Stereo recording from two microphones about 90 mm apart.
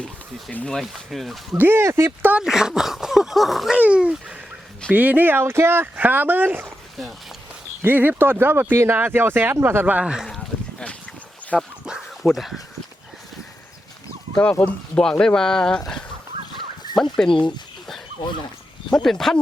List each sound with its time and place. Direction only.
0.7 s speech: centre (ahead or behind)
1.5 s speech: 25° right (ahead or behind)
2.3 s speech: 5° right (ahead or behind)
3.8 s speech: 15° right (ahead or behind)
7.8 s speech: 20° right (ahead or behind)
10.0 s speech: 10° right (ahead or behind)
10.2 s a sound: 5° left (ahead or behind)
11.5 s speech: 10° left (ahead or behind)
14.6 s speech: 10° left (ahead or behind)
16.9 s speech: 5° left (ahead or behind)
18.9 s speech: 5° left (ahead or behind)